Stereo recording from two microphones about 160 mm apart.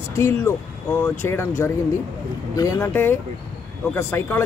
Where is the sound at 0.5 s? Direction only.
15° left (ahead or behind).